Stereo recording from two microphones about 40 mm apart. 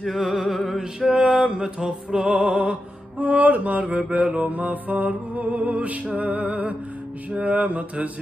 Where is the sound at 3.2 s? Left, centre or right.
Right.